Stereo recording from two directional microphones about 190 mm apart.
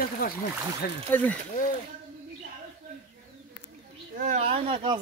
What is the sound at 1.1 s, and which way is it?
Speech, 10° left (ahead or behind).